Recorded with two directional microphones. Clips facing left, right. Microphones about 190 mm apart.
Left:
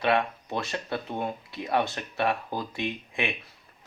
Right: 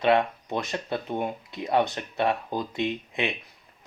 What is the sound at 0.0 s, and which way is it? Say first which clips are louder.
Speech: right 3 dB; 20° right (ahead or behind).